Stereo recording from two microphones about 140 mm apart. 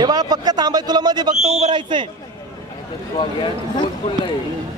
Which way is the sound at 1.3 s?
5° right (ahead or behind).